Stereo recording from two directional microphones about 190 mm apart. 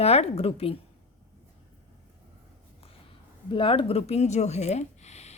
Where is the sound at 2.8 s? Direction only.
30° left (ahead or behind).